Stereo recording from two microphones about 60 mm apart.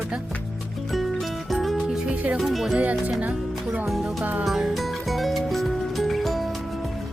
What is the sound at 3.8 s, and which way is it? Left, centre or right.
Music, centre.